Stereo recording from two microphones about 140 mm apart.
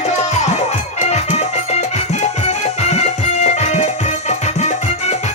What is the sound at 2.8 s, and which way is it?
Music, 55° left (ahead or behind).